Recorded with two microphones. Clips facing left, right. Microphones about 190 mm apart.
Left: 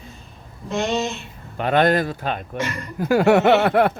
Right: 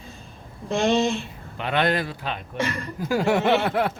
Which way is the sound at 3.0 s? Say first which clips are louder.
Left 6 dB; 65° left (ahead or behind).